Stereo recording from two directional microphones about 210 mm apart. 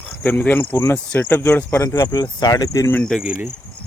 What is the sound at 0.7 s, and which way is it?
Speech, 10° left (ahead or behind).